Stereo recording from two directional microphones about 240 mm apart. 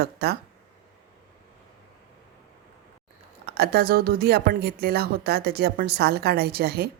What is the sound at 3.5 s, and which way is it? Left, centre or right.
A woman's voice, right.